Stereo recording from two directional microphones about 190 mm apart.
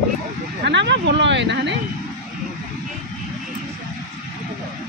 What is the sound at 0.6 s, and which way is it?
Speech, 70° right (ahead or behind).